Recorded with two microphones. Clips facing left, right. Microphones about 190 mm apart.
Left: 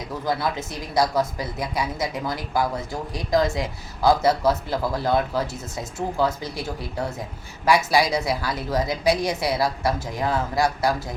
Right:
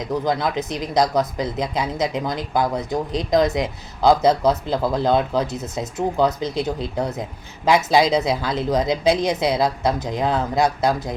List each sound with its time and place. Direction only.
0.0 s speech: 20° right (ahead or behind)